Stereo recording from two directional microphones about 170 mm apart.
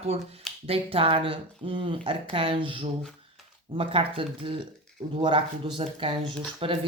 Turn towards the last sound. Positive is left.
turn(degrees=-30)  # may be behind; listen again after turning